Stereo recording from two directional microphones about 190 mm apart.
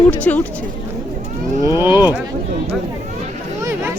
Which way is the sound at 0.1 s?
10° left (ahead or behind).